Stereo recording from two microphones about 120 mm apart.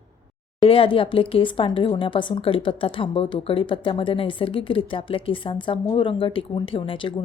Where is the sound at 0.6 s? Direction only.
45° left (ahead or behind).